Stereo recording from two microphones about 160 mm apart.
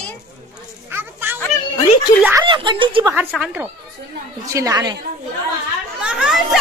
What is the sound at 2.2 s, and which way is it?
Speech, 15° right (ahead or behind).